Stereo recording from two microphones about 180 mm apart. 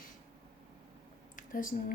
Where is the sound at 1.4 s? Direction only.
50° left (ahead or behind).